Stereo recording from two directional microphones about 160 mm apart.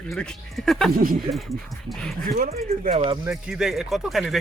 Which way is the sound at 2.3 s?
65° right (ahead or behind).